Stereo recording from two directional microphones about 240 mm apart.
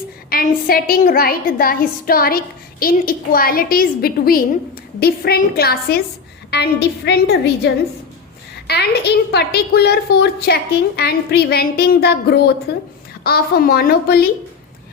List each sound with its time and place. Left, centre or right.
0.3 s a woman's voice: left